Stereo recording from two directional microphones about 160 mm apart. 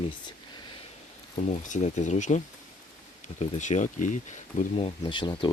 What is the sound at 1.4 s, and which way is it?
Speech, 50° left (ahead or behind).